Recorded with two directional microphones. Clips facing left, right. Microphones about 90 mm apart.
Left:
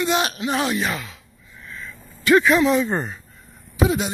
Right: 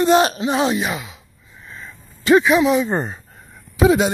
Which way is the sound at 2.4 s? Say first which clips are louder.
Right 2 dB; 10° right (ahead or behind).